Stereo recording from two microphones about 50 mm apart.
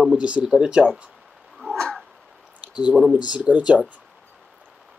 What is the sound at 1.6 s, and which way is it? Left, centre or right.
Cat, centre.